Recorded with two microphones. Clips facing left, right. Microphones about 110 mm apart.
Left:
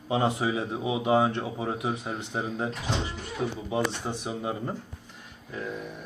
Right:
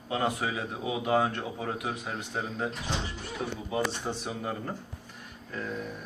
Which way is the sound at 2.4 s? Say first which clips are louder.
Left 2 dB; 10° left (ahead or behind).